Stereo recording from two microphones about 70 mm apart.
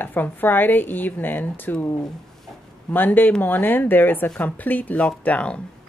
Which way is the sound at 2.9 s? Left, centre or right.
Left.